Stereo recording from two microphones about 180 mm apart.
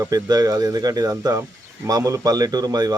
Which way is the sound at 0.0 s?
20° right (ahead or behind).